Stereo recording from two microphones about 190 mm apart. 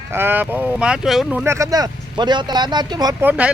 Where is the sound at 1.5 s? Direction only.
15° right (ahead or behind).